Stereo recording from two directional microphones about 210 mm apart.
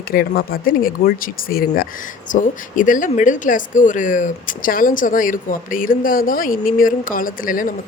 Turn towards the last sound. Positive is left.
turn(degrees=40)  # may be behind; listen again after turning